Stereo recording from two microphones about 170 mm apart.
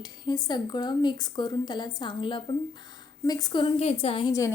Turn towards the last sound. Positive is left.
turn(degrees=35)  # may be behind; listen again after turning